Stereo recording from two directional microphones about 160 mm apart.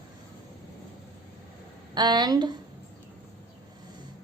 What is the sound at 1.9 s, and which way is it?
Speech, 25° right (ahead or behind).